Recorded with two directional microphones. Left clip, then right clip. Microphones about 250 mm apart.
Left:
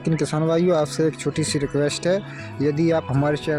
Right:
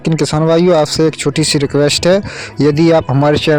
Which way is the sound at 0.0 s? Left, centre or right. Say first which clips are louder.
Right 9 dB; right.